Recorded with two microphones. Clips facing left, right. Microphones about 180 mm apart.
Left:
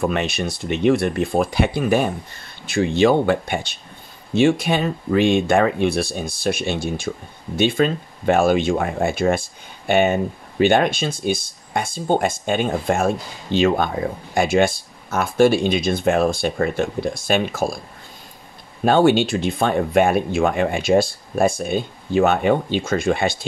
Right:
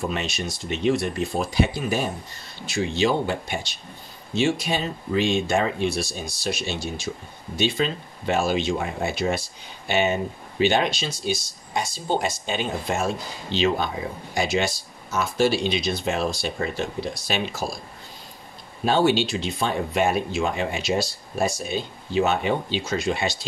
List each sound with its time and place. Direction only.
0.0 s speech: 55° left (ahead or behind)
18.9 s speech: 55° left (ahead or behind)